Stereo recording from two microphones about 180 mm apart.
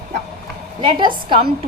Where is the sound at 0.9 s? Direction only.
25° right (ahead or behind).